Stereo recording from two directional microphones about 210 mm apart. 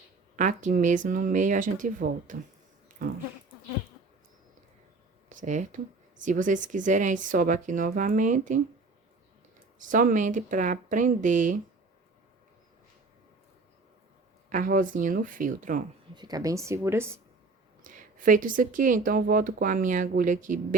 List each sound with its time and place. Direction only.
0.3 s speech: 35° right (ahead or behind)
5.3 s speech: 35° right (ahead or behind)
9.9 s speech: 40° right (ahead or behind)
14.5 s speech: 40° right (ahead or behind)
16.1 s speech: 20° right (ahead or behind)
17.8 s speech: 40° right (ahead or behind)